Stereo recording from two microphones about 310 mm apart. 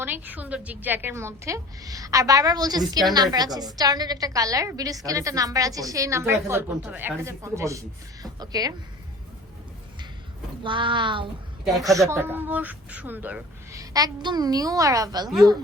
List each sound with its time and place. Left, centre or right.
0.0 s a woman's voice: centre
10.6 s a woman's voice: centre
11.9 s a woman's voice: centre